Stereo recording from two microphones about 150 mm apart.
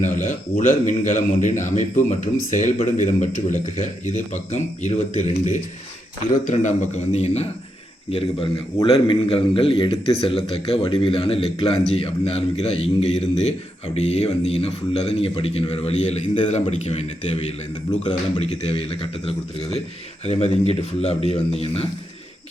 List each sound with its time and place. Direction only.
0.0 s a man's voice: 55° left (ahead or behind)
18.7 s a man's voice: 40° left (ahead or behind)